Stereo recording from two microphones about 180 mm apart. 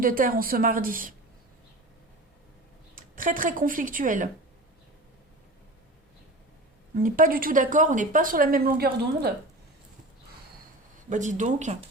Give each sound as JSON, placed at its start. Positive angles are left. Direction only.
{"t": 0.0, "sound": "speech", "side_deg": -50}
{"t": 2.9, "sound": "speech", "side_deg": -50}
{"t": 6.9, "sound": "speech", "side_deg": -50}
{"t": 11.1, "sound": "speech", "side_deg": -45}